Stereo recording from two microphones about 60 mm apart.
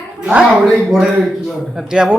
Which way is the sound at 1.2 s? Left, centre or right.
Centre.